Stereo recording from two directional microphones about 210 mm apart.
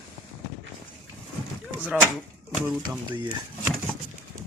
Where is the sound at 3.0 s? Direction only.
20° right (ahead or behind).